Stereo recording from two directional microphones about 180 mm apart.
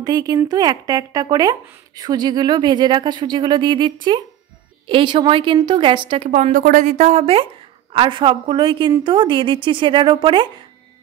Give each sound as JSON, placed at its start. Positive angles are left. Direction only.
{"t": 0.0, "sound": "a woman's voice", "side_deg": -20}